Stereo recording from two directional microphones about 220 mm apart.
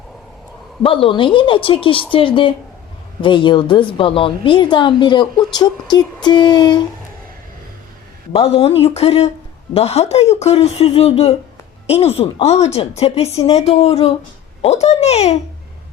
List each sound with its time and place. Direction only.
0.8 s a woman's voice: 25° left (ahead or behind)
8.3 s a woman's voice: 25° left (ahead or behind)